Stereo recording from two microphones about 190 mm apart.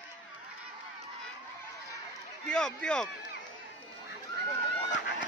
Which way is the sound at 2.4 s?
5° left (ahead or behind).